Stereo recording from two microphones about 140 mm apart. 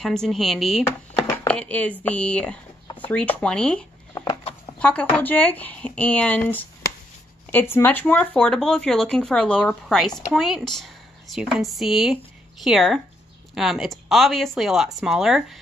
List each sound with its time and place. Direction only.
0.0 s speech: 5° left (ahead or behind)
4.1 s a sound: 25° left (ahead or behind)
4.7 s speech: 10° left (ahead or behind)